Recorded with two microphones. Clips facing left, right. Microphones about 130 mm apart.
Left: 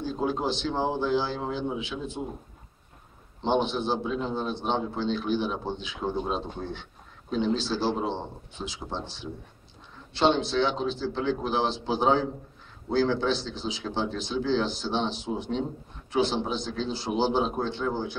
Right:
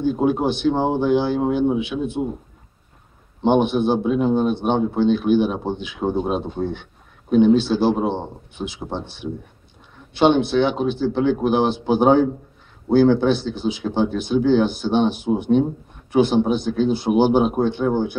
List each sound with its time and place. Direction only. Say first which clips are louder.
0.0 s speech: right 9 dB; 60° right (ahead or behind)
3.4 s speech: right 8 dB; 60° right (ahead or behind)